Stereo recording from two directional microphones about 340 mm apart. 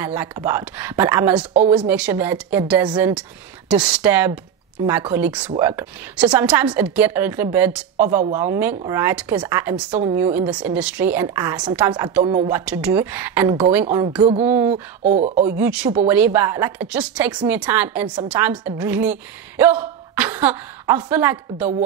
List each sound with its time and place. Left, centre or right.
0.0 s a woman's voice: centre
12.4 s a woman's voice: centre
14.7 s speech: centre
15.6 s a woman's voice: centre